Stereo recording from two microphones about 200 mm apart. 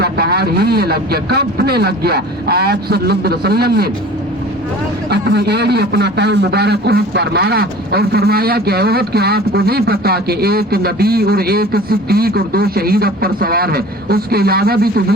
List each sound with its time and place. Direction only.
0.0 s a man's voice: 50° right (ahead or behind)
5.1 s a man's voice: 55° right (ahead or behind)